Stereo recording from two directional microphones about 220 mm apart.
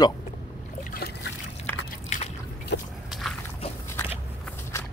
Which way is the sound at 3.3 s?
Centre (ahead or behind).